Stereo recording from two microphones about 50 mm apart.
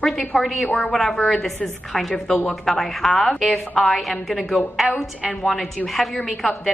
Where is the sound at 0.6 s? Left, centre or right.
Left.